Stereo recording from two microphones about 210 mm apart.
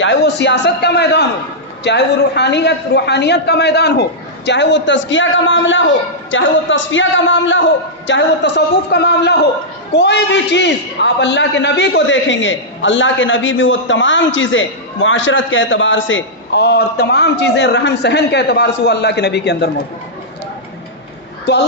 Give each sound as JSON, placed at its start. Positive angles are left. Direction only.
{"t": 0.0, "sound": "a man's voice", "side_deg": 55}
{"t": 21.5, "sound": "a man's voice", "side_deg": 50}